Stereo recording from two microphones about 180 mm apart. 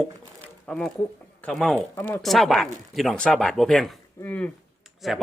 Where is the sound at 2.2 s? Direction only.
Centre (ahead or behind).